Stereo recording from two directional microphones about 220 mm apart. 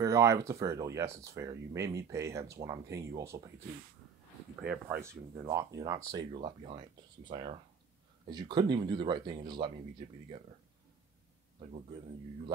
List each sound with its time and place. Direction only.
0.0 s speech: 15° right (ahead or behind)
4.6 s speech: 5° right (ahead or behind); by 10.0 s 20° right (ahead or behind)